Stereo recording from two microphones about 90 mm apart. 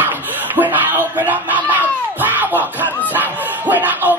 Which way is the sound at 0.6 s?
20° right (ahead or behind).